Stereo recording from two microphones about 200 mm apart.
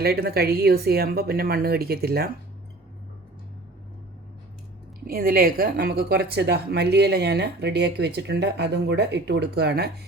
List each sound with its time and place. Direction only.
0.0 s a woman's voice: 50° right (ahead or behind)
5.0 s speech: 50° right (ahead or behind)